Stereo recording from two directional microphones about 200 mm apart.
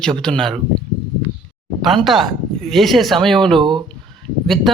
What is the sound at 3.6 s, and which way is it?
Speech, 25° right (ahead or behind).